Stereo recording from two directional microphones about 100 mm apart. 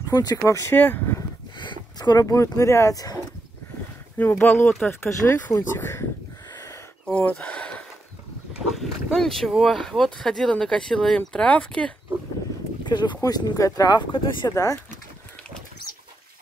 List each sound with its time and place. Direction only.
0.1 s speech: 40° left (ahead or behind)
0.5 s speech: 30° left (ahead or behind)
0.7 s speech: 20° left (ahead or behind)
1.6 s speech: 45° left (ahead or behind)
4.2 s speech: 15° left (ahead or behind)
5.0 s speech: 30° left (ahead or behind)
6.5 s a sound: 35° left (ahead or behind)
7.1 s speech: 15° left (ahead or behind)
8.7 s speech: 5° left (ahead or behind)
12.8 s speech: 50° left (ahead or behind)
14.5 s speech: 35° left (ahead or behind)